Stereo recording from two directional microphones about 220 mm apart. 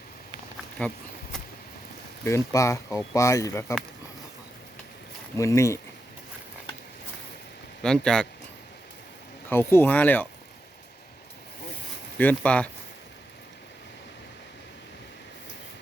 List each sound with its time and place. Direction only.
0.8 s a sound: centre (ahead or behind)
2.2 s speech: 15° left (ahead or behind)
5.4 s speech: 15° left (ahead or behind)
7.8 s speech: 5° left (ahead or behind)
9.5 s speech: 10° left (ahead or behind)
12.1 s speech: 5° left (ahead or behind)